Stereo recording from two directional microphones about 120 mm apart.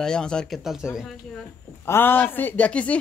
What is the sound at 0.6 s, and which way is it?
Speech, 5° right (ahead or behind).